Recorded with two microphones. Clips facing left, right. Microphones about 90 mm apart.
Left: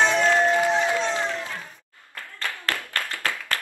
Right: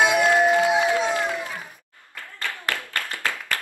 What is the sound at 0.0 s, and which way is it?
Music, 10° right (ahead or behind).